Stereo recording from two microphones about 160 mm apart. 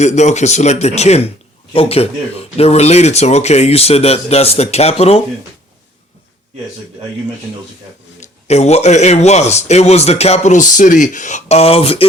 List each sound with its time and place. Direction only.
0.0 s a man's voice: 45° left (ahead or behind)
8.2 s a man's voice: 45° left (ahead or behind)